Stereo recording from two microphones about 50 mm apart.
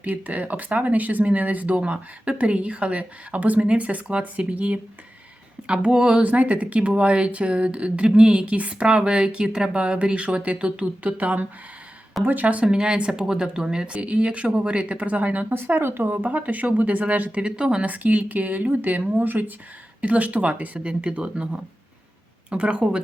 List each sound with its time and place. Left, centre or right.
0.0 s speech: right; by 6.2 s centre
6.2 s speech: right
12.6 s speech: centre
13.8 s speech: right
15.5 s speech: right
16.1 s speech: right
17.4 s speech: centre
17.8 s speech: right